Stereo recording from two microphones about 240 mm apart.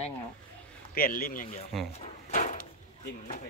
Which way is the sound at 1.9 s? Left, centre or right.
Left.